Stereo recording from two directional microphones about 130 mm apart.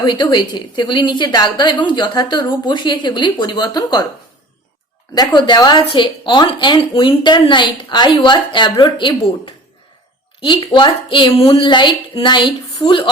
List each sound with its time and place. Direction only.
0.1 s a woman's voice: 35° left (ahead or behind)
5.1 s a woman's voice: 35° left (ahead or behind)